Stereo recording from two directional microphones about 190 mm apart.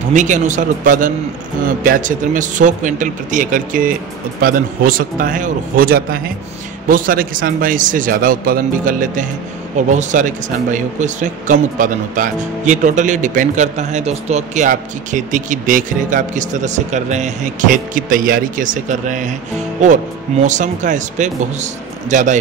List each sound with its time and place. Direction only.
0.1 s a man's voice: 40° right (ahead or behind)